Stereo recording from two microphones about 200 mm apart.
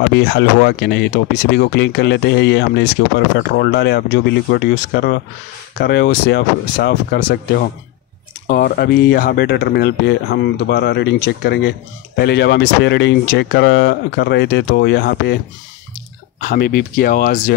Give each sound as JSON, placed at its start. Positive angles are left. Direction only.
{"t": 0.1, "sound": "speech", "side_deg": 55}
{"t": 16.3, "sound": "speech", "side_deg": 45}